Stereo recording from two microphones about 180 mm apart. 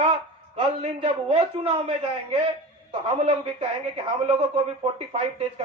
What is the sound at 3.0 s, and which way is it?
Speech, 30° right (ahead or behind).